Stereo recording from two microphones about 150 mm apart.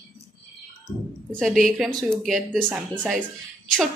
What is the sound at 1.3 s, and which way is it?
A woman's voice, 5° left (ahead or behind).